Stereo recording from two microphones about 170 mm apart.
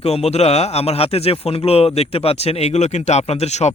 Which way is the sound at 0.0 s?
40° left (ahead or behind).